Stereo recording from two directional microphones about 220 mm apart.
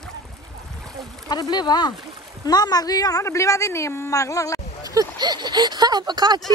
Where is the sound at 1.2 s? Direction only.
20° left (ahead or behind).